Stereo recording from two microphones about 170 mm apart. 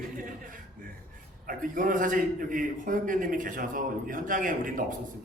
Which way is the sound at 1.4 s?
55° right (ahead or behind).